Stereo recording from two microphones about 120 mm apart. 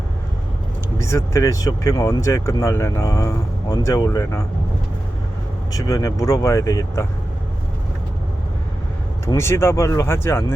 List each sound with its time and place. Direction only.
0.9 s speech: 25° left (ahead or behind)
5.7 s speech: 30° left (ahead or behind)
9.2 s speech: 20° left (ahead or behind)